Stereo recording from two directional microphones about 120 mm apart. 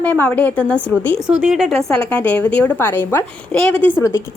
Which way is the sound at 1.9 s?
10° left (ahead or behind).